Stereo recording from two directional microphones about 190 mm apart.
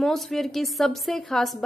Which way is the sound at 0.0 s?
Centre (ahead or behind).